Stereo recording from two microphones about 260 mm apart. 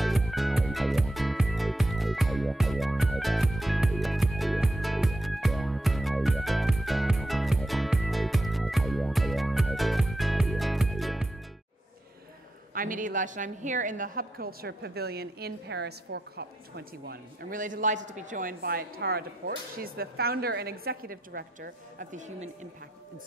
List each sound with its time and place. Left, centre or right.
0.0 s music: centre
12.7 s a woman's voice: right